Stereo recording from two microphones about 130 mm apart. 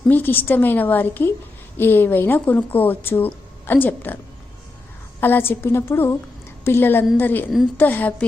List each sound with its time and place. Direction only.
0.1 s speech: 15° left (ahead or behind)
5.2 s speech: 15° left (ahead or behind)